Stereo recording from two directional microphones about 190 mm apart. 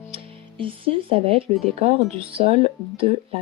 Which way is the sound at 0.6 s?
30° right (ahead or behind).